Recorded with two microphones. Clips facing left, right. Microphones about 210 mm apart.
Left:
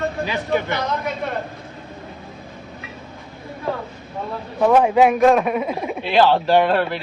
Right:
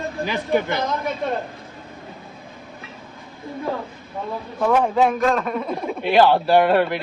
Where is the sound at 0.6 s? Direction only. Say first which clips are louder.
Right 1 dB; 50° right (ahead or behind).